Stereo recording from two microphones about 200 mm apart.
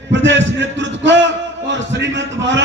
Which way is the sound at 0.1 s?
65° right (ahead or behind).